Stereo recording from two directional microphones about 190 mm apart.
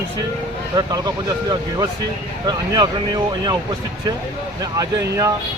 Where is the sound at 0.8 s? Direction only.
20° right (ahead or behind).